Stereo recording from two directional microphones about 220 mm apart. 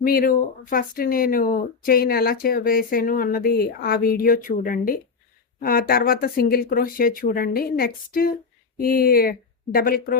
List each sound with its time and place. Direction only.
0.0 s speech: 40° left (ahead or behind)